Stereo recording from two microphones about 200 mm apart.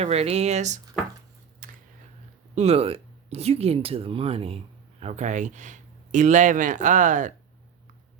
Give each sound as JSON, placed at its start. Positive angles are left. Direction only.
{"t": 0.0, "sound": "speech", "side_deg": -30}
{"t": 1.6, "sound": "a sound", "side_deg": -45}
{"t": 2.6, "sound": "speech", "side_deg": -30}